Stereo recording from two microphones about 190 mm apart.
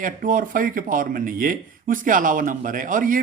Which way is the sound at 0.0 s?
45° right (ahead or behind).